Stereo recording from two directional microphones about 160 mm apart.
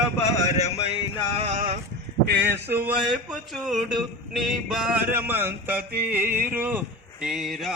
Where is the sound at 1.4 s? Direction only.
45° right (ahead or behind).